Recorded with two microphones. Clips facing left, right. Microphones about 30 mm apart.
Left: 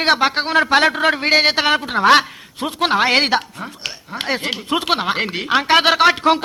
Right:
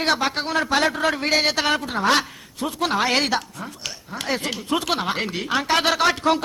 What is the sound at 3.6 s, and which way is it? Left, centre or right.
A man's voice, left.